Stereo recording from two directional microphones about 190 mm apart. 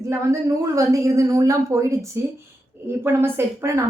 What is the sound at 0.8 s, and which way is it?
A woman's voice, 15° right (ahead or behind).